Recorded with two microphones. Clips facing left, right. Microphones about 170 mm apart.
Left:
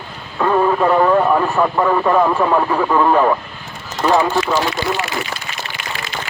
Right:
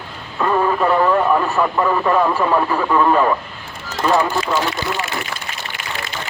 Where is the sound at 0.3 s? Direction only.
10° left (ahead or behind).